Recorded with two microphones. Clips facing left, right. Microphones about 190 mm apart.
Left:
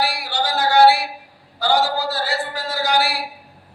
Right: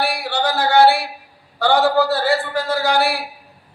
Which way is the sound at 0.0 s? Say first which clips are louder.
Right 2 dB; 60° right (ahead or behind).